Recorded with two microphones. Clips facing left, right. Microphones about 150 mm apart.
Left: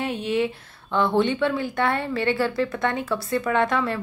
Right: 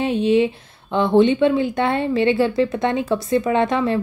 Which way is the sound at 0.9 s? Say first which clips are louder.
Right 6 dB; 20° right (ahead or behind).